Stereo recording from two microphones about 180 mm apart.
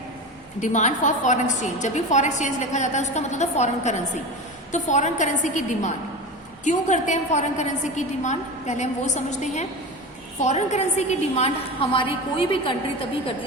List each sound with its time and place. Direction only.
0.6 s a woman's voice: 40° left (ahead or behind)